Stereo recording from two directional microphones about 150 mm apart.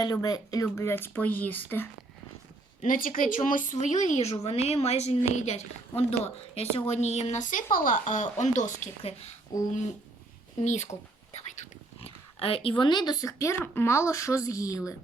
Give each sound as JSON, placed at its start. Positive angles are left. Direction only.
{"t": 0.0, "sound": "speech", "side_deg": 25}
{"t": 2.8, "sound": "a woman's voice", "side_deg": 65}
{"t": 8.0, "sound": "a woman's voice", "side_deg": 55}
{"t": 9.5, "sound": "speech", "side_deg": 25}
{"t": 10.6, "sound": "a woman's voice", "side_deg": 50}